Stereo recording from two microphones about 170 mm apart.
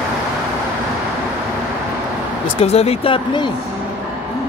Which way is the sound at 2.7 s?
35° left (ahead or behind).